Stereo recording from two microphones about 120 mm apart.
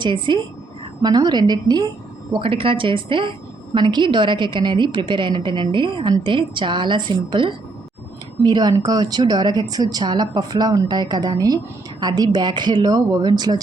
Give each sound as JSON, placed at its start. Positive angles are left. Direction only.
{"t": 0.0, "sound": "speech", "side_deg": -40}
{"t": 2.3, "sound": "speech", "side_deg": -50}